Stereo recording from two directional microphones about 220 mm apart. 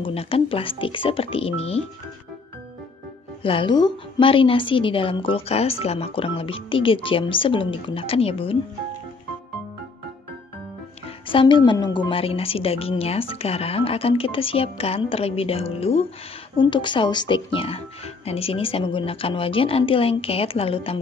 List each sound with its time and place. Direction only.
0.0 s a woman's voice: 25° left (ahead or behind)
3.4 s a woman's voice: 20° left (ahead or behind)
11.2 s a woman's voice: 20° left (ahead or behind)